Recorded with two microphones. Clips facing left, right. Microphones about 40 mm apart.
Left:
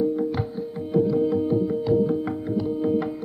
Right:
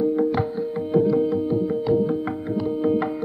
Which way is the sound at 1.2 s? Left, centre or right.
Centre.